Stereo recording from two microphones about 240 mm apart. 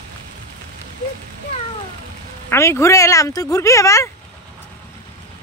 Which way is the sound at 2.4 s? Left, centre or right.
Centre.